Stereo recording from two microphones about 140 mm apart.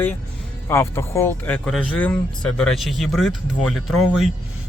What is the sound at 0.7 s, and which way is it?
A man's voice, 20° left (ahead or behind).